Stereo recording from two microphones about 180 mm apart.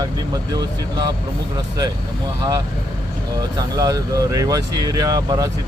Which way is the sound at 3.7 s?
20° right (ahead or behind).